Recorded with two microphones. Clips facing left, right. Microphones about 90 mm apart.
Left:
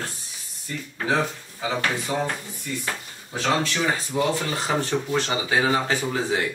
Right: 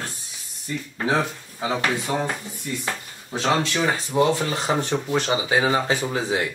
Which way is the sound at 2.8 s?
20° right (ahead or behind).